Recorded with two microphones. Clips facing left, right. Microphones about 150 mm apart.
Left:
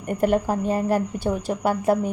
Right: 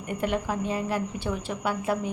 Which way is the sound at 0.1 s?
45° left (ahead or behind).